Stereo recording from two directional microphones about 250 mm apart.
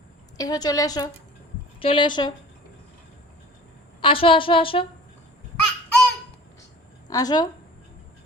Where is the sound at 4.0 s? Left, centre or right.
Left.